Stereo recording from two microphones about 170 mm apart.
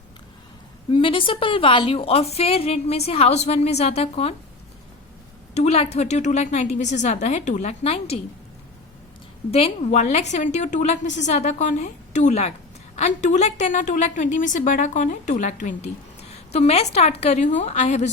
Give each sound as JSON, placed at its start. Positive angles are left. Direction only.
{"t": 0.9, "sound": "a woman's voice", "side_deg": 30}
{"t": 5.5, "sound": "a woman's voice", "side_deg": 35}
{"t": 9.5, "sound": "a woman's voice", "side_deg": 35}